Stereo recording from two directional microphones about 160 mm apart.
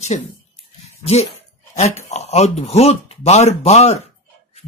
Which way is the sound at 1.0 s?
40° left (ahead or behind).